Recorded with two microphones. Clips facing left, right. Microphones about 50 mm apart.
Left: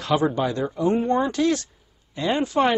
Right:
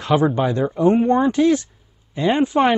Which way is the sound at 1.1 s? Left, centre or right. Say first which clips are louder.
Right 5 dB; centre.